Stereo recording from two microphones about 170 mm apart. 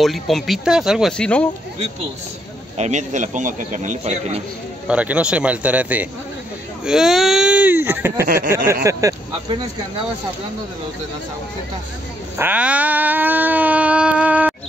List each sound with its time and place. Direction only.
0.0 s speech: centre (ahead or behind)
2.8 s a man's voice: 45° right (ahead or behind)
4.8 s a man's voice: 5° right (ahead or behind)
12.4 s a sound: 10° right (ahead or behind)